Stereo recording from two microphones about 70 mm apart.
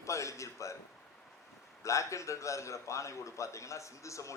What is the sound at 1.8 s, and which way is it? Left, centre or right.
A man's voice, left.